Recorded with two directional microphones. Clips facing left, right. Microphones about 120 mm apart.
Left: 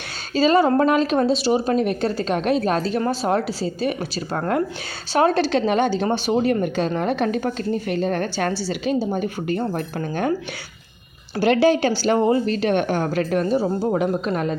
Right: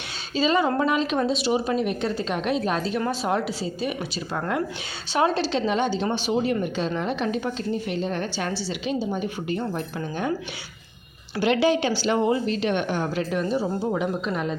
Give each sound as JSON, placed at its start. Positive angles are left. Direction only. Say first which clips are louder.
{"t": 0.3, "sound": "a woman's voice", "louder": "left 5 dB", "side_deg": 40}
{"t": 11.3, "sound": "a woman's voice", "louder": "left 4 dB", "side_deg": 40}